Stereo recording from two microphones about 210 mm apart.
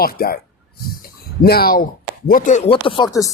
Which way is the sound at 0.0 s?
45° left (ahead or behind).